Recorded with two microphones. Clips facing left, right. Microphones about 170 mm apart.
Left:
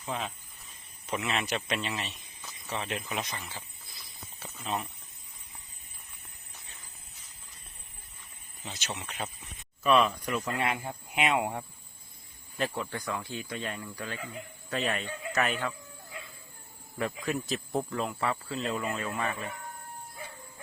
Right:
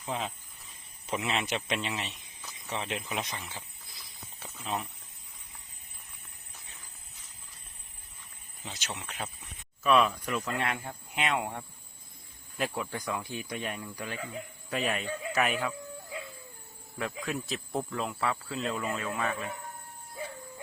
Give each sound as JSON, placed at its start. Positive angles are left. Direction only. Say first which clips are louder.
{"t": 0.1, "sound": "speech", "louder": "right 1 dB", "side_deg": -20}
{"t": 2.4, "sound": "cricket", "louder": "even", "side_deg": 0}
{"t": 3.1, "sound": "speech", "louder": "even", "side_deg": -10}
{"t": 8.9, "sound": "speech", "louder": "left 2 dB", "side_deg": 0}
{"t": 12.5, "sound": "speech", "louder": "left 1 dB", "side_deg": -10}
{"t": 17.0, "sound": "speech", "louder": "left 3 dB", "side_deg": 0}